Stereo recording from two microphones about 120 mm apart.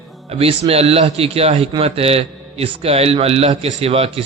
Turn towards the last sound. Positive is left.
turn(degrees=-55)  # may be behind; listen again after turning